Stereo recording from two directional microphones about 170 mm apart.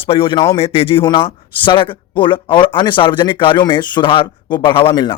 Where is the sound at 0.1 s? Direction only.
30° left (ahead or behind).